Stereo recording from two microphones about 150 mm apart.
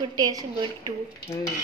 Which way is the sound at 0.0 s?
25° right (ahead or behind).